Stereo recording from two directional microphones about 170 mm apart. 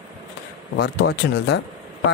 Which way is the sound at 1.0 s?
80° left.